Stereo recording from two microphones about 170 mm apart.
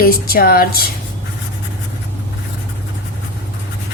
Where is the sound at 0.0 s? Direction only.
60° left (ahead or behind).